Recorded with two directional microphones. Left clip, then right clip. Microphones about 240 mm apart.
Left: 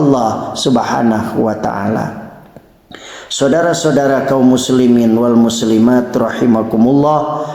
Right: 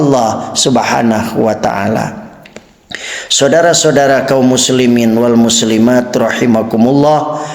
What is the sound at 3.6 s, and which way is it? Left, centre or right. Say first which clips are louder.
A man's voice: right 4 dB; right.